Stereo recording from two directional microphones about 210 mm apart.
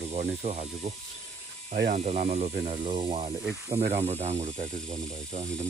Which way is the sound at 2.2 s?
30° right (ahead or behind).